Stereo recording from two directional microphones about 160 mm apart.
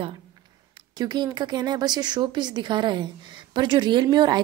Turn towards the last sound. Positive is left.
turn(degrees=-25)  # may be behind; listen again after turning